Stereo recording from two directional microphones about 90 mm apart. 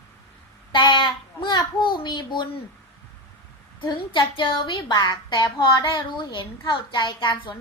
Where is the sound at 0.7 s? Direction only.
65° left (ahead or behind).